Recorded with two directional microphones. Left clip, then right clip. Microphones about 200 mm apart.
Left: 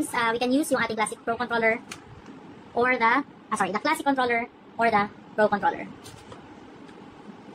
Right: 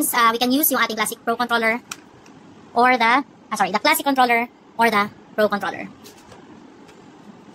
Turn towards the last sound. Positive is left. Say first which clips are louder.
# right 2 dB
turn(degrees=-50)  # may be behind; listen again after turning